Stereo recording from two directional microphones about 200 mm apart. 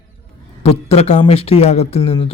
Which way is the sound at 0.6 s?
30° left (ahead or behind).